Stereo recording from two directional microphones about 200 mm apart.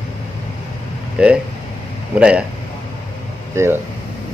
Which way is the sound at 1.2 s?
5° right (ahead or behind).